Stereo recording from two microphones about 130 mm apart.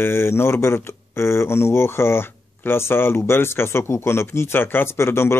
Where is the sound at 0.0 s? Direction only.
20° left (ahead or behind).